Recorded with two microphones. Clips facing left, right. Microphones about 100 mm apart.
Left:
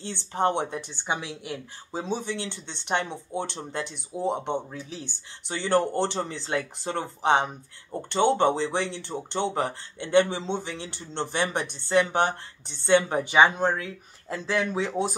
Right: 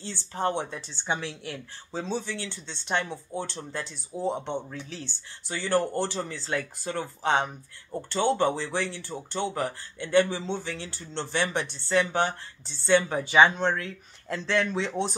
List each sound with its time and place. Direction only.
0.3 s speech: 20° left (ahead or behind)